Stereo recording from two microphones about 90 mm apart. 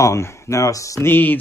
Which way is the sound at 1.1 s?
20° left (ahead or behind).